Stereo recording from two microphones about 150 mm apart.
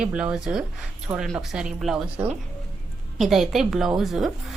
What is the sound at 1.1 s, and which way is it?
Speech, 25° right (ahead or behind).